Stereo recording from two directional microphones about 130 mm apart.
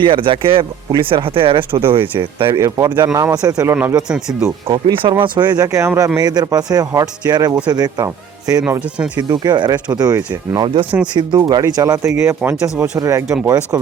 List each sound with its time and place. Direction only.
0.0 s speech: 40° right (ahead or behind)
2.6 s speech: 25° right (ahead or behind)
4.1 s speech: 5° right (ahead or behind)
4.7 s speech: 40° right (ahead or behind)
5.6 s speech: 20° right (ahead or behind)
13.2 s speech: 5° right (ahead or behind)